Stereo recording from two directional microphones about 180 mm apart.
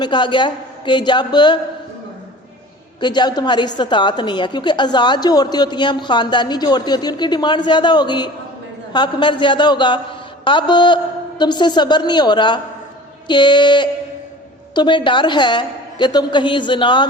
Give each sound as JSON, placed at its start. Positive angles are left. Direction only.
{"t": 0.0, "sound": "a woman's voice", "side_deg": 25}
{"t": 3.0, "sound": "a woman's voice", "side_deg": 25}